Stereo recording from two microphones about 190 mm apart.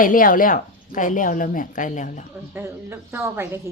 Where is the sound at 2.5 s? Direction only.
10° right (ahead or behind).